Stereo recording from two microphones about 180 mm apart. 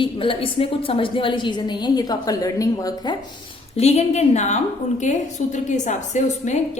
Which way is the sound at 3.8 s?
35° left (ahead or behind).